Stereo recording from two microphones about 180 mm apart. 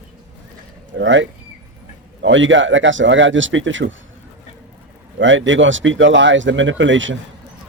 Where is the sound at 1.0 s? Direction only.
85° right.